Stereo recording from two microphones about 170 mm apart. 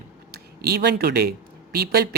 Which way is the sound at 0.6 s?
75° right (ahead or behind).